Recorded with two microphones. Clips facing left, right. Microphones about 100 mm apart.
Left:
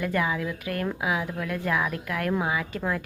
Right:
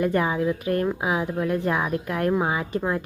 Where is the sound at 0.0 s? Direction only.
30° right (ahead or behind).